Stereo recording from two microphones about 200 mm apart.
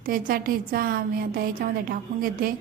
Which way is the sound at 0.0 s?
45° right (ahead or behind).